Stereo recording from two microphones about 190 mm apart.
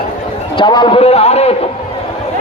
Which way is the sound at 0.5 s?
25° left (ahead or behind).